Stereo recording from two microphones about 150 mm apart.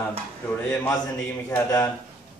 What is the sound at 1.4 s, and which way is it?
Speech, 20° left (ahead or behind).